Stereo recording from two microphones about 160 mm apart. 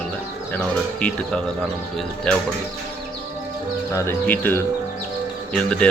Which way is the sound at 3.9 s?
15° left (ahead or behind).